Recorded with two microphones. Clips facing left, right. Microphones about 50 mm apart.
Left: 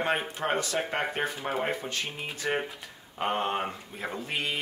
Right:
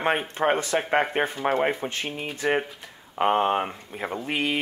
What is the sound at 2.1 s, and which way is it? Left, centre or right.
Speech, centre.